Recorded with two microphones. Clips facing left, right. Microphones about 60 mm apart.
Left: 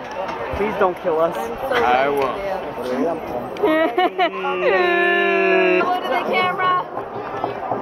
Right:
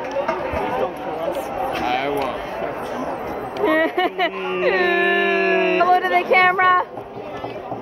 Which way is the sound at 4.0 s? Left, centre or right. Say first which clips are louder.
Left 2 dB; centre.